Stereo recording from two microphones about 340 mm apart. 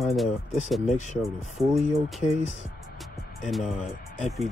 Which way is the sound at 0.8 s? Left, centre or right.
Left.